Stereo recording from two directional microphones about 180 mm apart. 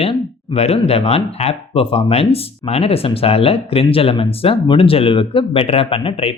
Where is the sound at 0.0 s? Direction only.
35° left (ahead or behind).